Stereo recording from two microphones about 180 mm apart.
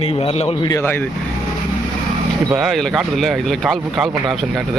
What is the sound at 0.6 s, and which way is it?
Speech, 15° left (ahead or behind).